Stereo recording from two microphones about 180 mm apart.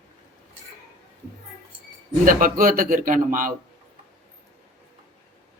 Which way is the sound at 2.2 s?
50° right (ahead or behind).